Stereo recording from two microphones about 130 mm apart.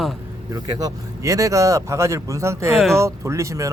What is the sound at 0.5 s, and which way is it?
Speech, 30° right (ahead or behind).